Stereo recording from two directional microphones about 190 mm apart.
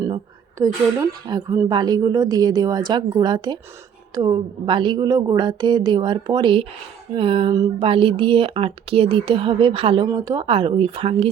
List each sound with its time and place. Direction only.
0.6 s a woman's voice: 15° right (ahead or behind)